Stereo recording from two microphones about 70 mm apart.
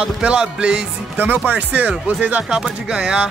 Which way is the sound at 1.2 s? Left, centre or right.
Right.